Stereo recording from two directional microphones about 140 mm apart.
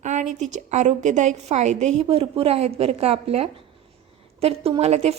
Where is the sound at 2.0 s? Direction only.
45° right (ahead or behind).